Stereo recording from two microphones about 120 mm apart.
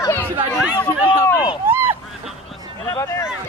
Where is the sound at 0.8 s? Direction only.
20° left (ahead or behind).